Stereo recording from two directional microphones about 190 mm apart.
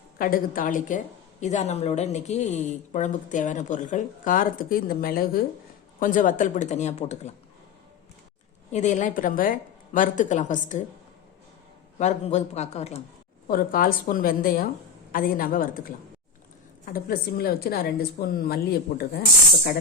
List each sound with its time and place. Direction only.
0.2 s a woman's voice: 50° left (ahead or behind)
8.7 s a woman's voice: 40° left (ahead or behind)
11.9 s a woman's voice: 35° left (ahead or behind)
13.5 s a woman's voice: 50° left (ahead or behind)
16.8 s a woman's voice: 50° left (ahead or behind)